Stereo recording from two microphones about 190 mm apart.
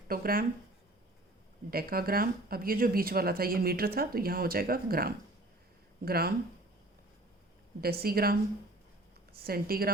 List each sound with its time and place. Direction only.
0.1 s speech: 50° right (ahead or behind)
1.7 s speech: 50° right (ahead or behind)
7.8 s speech: 55° right (ahead or behind)